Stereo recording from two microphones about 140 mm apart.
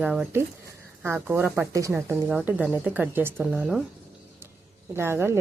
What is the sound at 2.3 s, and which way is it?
A woman's voice, 10° right (ahead or behind).